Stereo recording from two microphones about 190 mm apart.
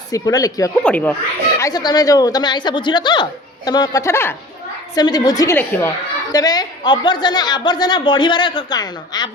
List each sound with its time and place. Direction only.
0.1 s a woman's voice: 20° left (ahead or behind)
0.8 s speech: 5° left (ahead or behind)
1.5 s a woman's voice: 20° left (ahead or behind)